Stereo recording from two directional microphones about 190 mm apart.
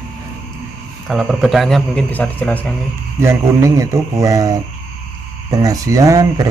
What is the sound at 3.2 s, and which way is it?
Speech, 15° right (ahead or behind).